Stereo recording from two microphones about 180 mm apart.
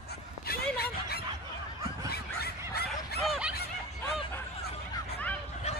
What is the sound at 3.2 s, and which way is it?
Dog, centre (ahead or behind).